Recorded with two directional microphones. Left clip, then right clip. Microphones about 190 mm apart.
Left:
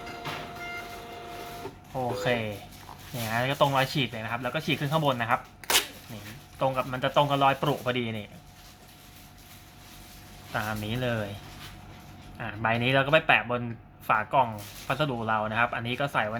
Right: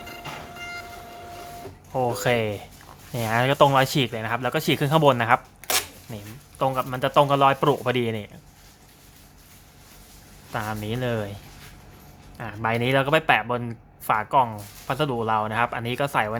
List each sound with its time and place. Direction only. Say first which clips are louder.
1.9 s speech: right 5 dB; 45° right (ahead or behind)
6.6 s speech: right 4 dB; 40° right (ahead or behind)
10.5 s speech: right 2 dB; 30° right (ahead or behind)
12.4 s speech: right 2 dB; 30° right (ahead or behind)